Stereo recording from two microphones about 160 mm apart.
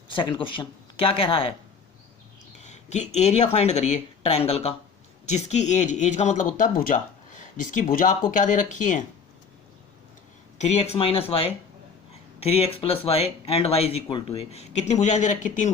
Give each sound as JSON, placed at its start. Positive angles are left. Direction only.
{"t": 0.1, "sound": "speech", "side_deg": 30}
{"t": 2.6, "sound": "speech", "side_deg": 45}
{"t": 10.7, "sound": "speech", "side_deg": 40}